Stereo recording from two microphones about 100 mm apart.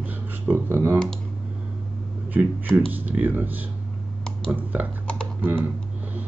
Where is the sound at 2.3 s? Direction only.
15° right (ahead or behind).